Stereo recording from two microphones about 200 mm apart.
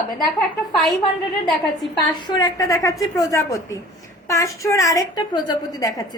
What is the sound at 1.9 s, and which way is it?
A woman's voice, 20° left (ahead or behind).